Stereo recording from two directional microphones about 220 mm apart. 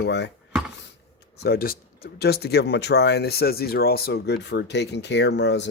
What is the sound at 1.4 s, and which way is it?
Speech, 45° left (ahead or behind).